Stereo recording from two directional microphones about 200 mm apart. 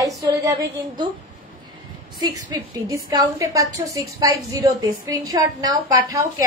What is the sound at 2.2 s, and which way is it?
A woman's voice, 20° right (ahead or behind).